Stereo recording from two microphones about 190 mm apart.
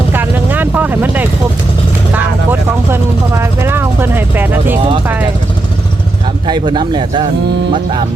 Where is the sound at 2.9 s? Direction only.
15° right (ahead or behind).